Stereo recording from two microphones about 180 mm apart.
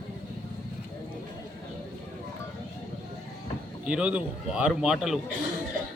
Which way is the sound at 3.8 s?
5° right (ahead or behind).